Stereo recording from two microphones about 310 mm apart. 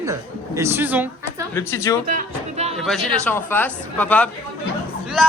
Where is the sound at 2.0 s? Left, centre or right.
Right.